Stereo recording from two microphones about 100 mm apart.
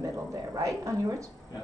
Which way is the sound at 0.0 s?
35° right (ahead or behind).